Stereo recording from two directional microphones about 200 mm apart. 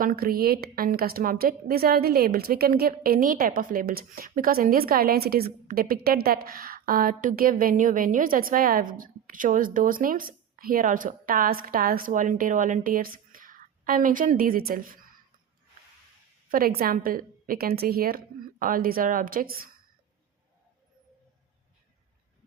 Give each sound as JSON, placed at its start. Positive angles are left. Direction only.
{"t": 0.0, "sound": "a woman's voice", "side_deg": -45}
{"t": 16.5, "sound": "a woman's voice", "side_deg": -45}